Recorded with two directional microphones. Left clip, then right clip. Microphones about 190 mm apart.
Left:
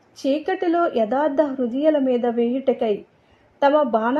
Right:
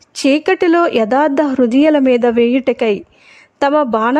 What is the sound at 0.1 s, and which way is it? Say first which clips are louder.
A woman's voice: right 9 dB; 45° right (ahead or behind).